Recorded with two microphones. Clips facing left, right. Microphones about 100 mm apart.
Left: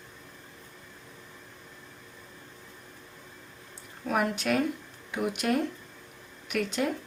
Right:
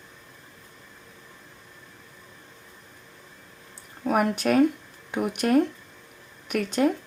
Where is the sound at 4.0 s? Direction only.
45° right (ahead or behind).